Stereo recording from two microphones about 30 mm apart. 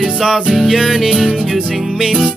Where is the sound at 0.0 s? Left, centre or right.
Centre.